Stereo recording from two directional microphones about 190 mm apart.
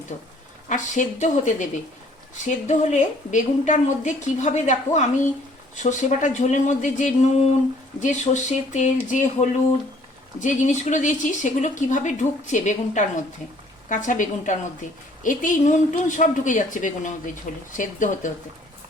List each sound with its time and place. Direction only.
0.7 s a woman's voice: 40° left (ahead or behind)